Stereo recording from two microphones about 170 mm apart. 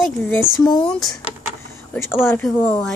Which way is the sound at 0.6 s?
25° left (ahead or behind).